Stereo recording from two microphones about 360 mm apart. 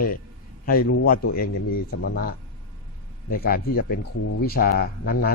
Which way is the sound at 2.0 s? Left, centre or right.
Left.